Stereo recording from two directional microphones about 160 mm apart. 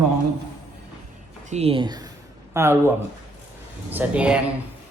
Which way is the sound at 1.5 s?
40° right (ahead or behind).